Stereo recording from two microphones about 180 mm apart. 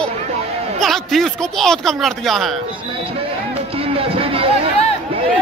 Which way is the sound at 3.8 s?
30° right (ahead or behind).